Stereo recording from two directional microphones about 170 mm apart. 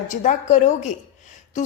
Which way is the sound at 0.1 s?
45° left (ahead or behind).